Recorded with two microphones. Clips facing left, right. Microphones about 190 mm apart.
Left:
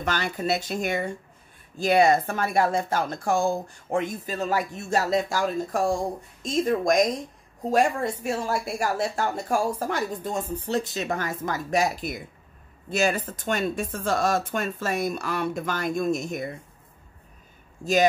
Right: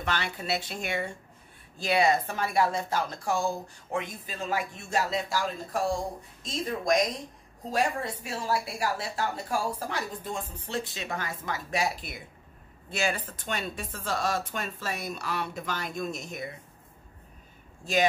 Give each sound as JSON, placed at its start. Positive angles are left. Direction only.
{"t": 0.0, "sound": "a woman's voice", "side_deg": 40}